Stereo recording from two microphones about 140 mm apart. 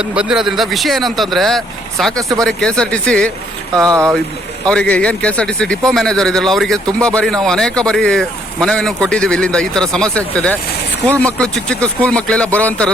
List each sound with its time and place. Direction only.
0.0 s a man's voice: 5° right (ahead or behind)
3.8 s speech: 25° right (ahead or behind)
4.7 s a man's voice: 10° left (ahead or behind)